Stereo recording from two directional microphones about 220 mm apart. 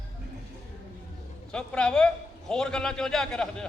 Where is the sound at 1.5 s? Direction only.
5° left (ahead or behind).